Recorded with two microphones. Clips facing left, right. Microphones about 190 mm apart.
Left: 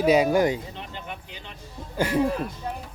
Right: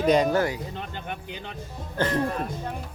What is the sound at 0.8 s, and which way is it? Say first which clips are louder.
Speech: right 2 dB; 50° right (ahead or behind).